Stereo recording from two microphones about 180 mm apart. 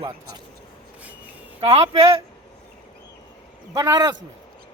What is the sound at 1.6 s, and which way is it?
Speech, 30° right (ahead or behind).